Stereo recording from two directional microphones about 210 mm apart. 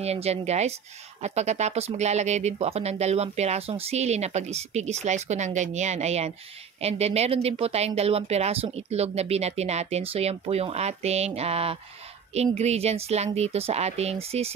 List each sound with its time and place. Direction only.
0.0 s speech: 30° right (ahead or behind)